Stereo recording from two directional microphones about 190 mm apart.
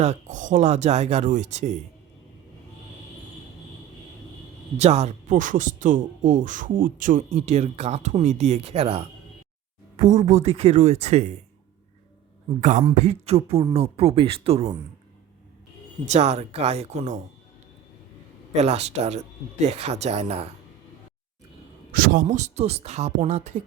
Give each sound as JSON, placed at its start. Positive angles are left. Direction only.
{"t": 0.0, "sound": "speech", "side_deg": -40}
{"t": 4.8, "sound": "speech", "side_deg": -35}
{"t": 12.5, "sound": "speech", "side_deg": -40}
{"t": 16.0, "sound": "speech", "side_deg": -35}
{"t": 18.5, "sound": "speech", "side_deg": -35}
{"t": 21.9, "sound": "speech", "side_deg": -50}